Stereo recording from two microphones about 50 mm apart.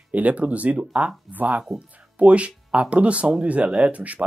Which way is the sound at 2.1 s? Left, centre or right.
Right.